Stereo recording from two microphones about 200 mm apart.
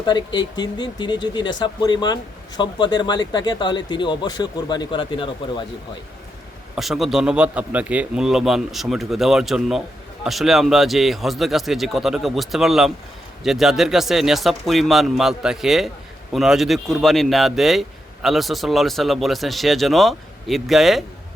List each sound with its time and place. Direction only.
0.0 s speech: 20° left (ahead or behind)
6.7 s a man's voice: centre (ahead or behind)